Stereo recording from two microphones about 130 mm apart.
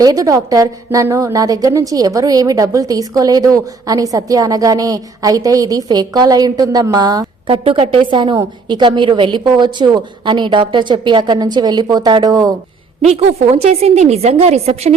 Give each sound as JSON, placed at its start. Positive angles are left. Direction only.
{"t": 0.0, "sound": "a woman's voice", "side_deg": -25}
{"t": 7.4, "sound": "a woman's voice", "side_deg": -45}
{"t": 13.0, "sound": "a woman's voice", "side_deg": -55}